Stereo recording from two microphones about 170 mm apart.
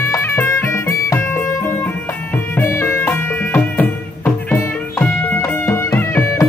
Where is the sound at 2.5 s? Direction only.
15° left (ahead or behind).